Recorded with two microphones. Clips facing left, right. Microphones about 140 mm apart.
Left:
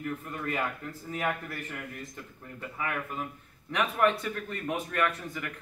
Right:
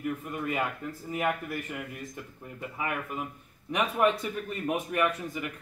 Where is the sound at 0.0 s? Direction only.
10° right (ahead or behind).